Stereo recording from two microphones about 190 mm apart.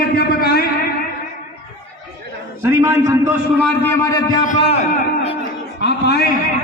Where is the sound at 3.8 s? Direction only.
10° left (ahead or behind).